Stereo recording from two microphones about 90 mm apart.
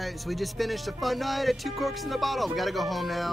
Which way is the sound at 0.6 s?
Centre (ahead or behind).